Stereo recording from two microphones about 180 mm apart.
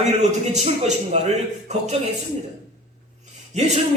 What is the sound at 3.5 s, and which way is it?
Speech, 40° right (ahead or behind).